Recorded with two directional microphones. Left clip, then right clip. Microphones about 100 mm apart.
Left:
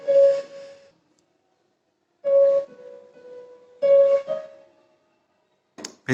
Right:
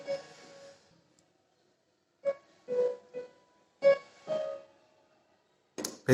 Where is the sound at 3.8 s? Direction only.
25° right (ahead or behind).